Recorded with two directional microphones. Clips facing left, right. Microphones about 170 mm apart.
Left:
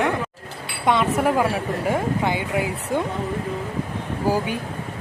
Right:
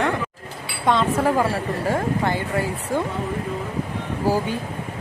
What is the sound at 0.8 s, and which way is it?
Speech, 20° left (ahead or behind).